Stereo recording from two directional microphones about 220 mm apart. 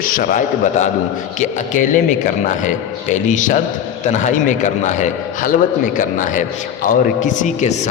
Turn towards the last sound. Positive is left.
turn(degrees=30)  # may be behind; listen again after turning